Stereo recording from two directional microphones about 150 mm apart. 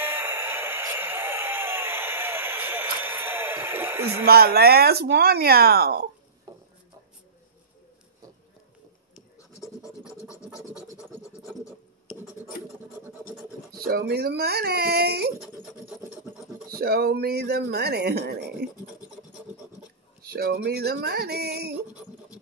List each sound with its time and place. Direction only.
0.0 s a sound: 15° right (ahead or behind)
4.3 s speech: 90° right
6.5 s a sound: 25° right (ahead or behind)
9.8 s scratch: 5° right (ahead or behind)
12.1 s scratch: centre (ahead or behind)
13.7 s speech: 90° right
16.7 s speech: 90° right
20.2 s speech: 85° right